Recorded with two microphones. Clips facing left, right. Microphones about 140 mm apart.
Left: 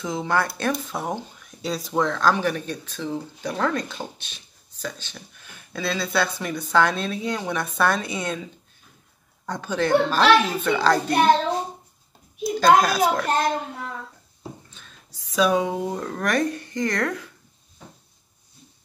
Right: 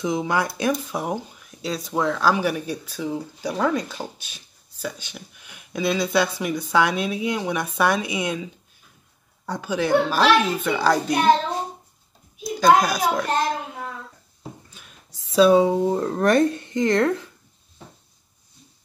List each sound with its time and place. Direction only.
0.0 s speech: 15° right (ahead or behind)
9.5 s speech: 10° right (ahead or behind)
12.5 s speech: 10° right (ahead or behind)
14.7 s whispering: 10° right (ahead or behind)
15.1 s speech: 25° right (ahead or behind)